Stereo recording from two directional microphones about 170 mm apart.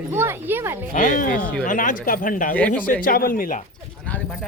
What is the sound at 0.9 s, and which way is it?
Speech, 50° left (ahead or behind).